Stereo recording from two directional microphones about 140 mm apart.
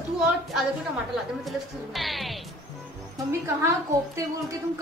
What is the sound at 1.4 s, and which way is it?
Speech, centre (ahead or behind).